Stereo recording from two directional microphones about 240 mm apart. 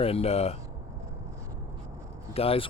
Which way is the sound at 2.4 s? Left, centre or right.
Left.